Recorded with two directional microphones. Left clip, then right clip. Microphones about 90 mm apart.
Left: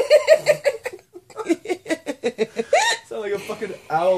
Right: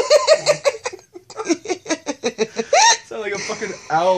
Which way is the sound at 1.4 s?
15° left (ahead or behind).